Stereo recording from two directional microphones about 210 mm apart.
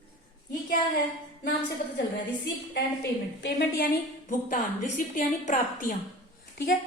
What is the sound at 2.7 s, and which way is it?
A woman's voice, 55° left (ahead or behind).